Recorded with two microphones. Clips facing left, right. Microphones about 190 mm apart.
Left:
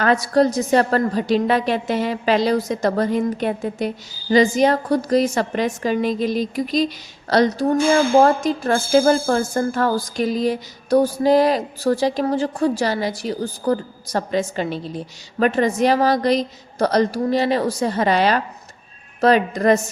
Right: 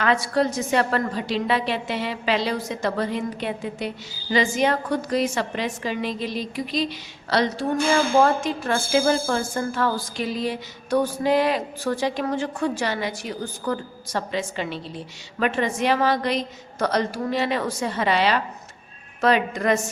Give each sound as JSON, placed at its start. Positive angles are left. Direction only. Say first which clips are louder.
{"t": 0.0, "sound": "a woman's voice", "louder": "left 5 dB", "side_deg": 40}